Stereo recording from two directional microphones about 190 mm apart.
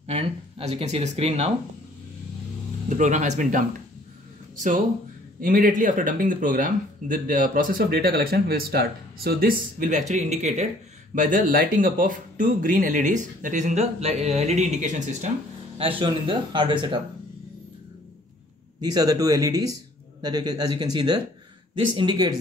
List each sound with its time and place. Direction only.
0.0 s speech: 30° right (ahead or behind)
2.9 s a man's voice: 40° right (ahead or behind)
15.8 s speech: 25° right (ahead or behind)
18.8 s speech: 20° right (ahead or behind)